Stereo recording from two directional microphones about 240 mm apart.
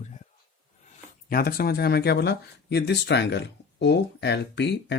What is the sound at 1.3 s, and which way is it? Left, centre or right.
Speech, left.